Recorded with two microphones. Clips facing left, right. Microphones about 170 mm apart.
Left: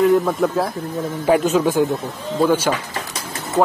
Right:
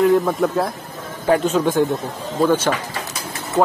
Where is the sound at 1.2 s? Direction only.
10° left (ahead or behind).